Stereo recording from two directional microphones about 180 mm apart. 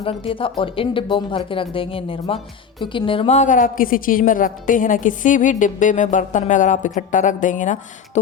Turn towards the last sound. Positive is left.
turn(degrees=45)  # may be behind; listen again after turning